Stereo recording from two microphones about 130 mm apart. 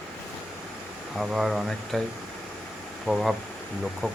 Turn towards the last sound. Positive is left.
turn(degrees=10)  # may be behind; listen again after turning